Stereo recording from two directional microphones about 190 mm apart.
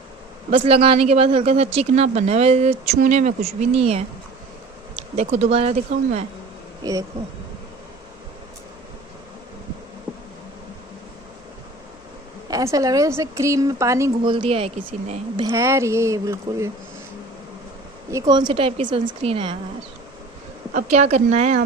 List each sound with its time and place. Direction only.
0.5 s speech: 30° right (ahead or behind)
5.1 s speech: 35° right (ahead or behind)
6.8 s speech: 20° right (ahead or behind)
12.4 s a woman's voice: 20° right (ahead or behind)
14.3 s a woman's voice: 30° right (ahead or behind)
15.3 s a woman's voice: 20° right (ahead or behind)
18.1 s a woman's voice: 20° right (ahead or behind)
20.7 s speech: 35° right (ahead or behind)